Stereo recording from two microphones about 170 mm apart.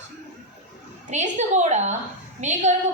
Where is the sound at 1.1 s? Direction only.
40° right (ahead or behind).